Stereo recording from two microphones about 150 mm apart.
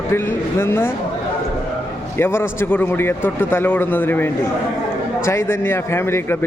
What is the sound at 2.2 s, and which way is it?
A man's voice, 15° left (ahead or behind).